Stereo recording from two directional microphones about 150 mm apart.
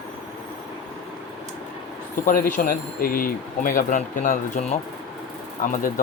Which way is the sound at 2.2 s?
70° left (ahead or behind).